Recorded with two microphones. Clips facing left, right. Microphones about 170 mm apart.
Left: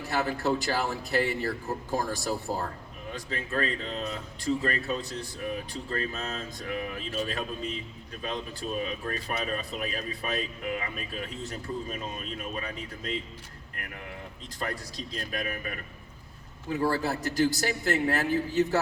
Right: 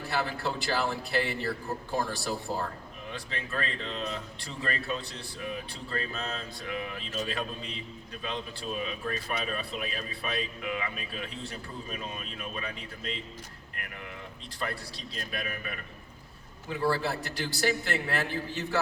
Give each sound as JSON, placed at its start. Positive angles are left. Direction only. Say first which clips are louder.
{"t": 0.1, "sound": "a man's voice", "louder": "left 5 dB", "side_deg": 40}
{"t": 8.8, "sound": "a man's voice", "louder": "left 1 dB", "side_deg": 40}
{"t": 14.6, "sound": "a man's voice", "louder": "left 2 dB", "side_deg": 40}